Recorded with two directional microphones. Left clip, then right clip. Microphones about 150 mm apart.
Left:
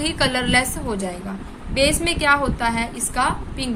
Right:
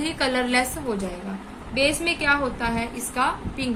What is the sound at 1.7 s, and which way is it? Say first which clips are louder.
A woman's voice: left 3 dB; 60° left (ahead or behind).